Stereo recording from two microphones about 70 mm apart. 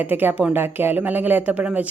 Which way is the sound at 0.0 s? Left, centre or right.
Right.